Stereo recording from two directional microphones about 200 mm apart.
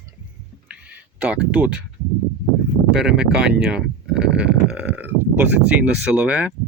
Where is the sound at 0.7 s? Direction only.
5° right (ahead or behind).